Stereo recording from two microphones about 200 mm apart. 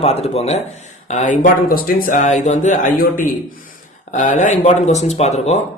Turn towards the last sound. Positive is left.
turn(degrees=35)  # may be behind; listen again after turning